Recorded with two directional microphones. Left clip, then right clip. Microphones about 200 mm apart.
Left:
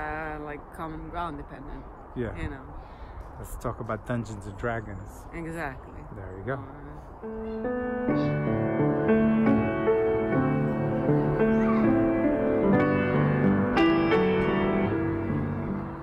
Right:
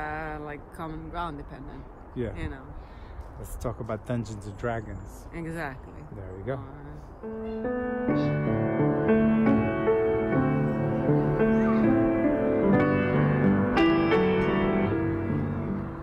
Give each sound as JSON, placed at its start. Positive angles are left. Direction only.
{"t": 0.0, "sound": "speech", "side_deg": -5}
{"t": 3.6, "sound": "speech", "side_deg": 15}
{"t": 5.3, "sound": "speech", "side_deg": -5}
{"t": 6.5, "sound": "speech", "side_deg": 15}
{"t": 7.2, "sound": "speech", "side_deg": 0}
{"t": 7.6, "sound": "music", "side_deg": 0}